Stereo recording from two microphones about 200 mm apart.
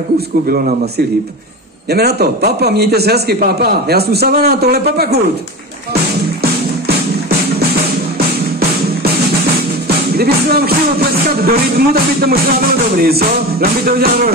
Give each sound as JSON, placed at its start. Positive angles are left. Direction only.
{"t": 0.5, "sound": "a man's voice", "side_deg": -45}
{"t": 9.8, "sound": "a man's voice", "side_deg": -50}